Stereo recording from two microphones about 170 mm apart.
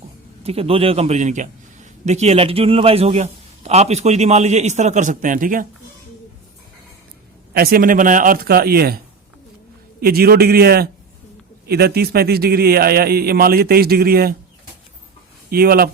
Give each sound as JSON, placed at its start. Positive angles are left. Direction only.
{"t": 0.4, "sound": "a man's voice", "side_deg": -35}
{"t": 7.5, "sound": "a man's voice", "side_deg": -60}
{"t": 10.0, "sound": "a man's voice", "side_deg": -65}
{"t": 15.4, "sound": "speech", "side_deg": -60}